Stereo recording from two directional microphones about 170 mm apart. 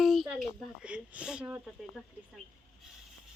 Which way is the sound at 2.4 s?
50° left (ahead or behind).